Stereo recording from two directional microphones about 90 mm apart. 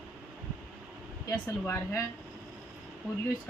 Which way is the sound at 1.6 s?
25° left (ahead or behind).